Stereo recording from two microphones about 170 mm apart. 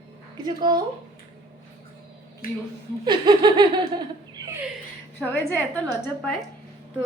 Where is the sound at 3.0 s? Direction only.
25° right (ahead or behind).